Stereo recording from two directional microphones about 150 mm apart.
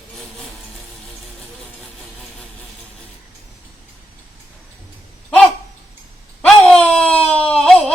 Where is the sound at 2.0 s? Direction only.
5° left (ahead or behind).